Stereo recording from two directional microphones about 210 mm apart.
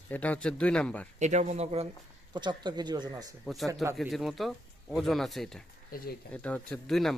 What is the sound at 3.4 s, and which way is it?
A man's voice, centre (ahead or behind).